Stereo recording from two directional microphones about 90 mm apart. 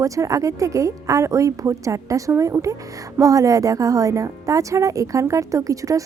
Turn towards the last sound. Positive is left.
turn(degrees=-40)  # may be behind; listen again after turning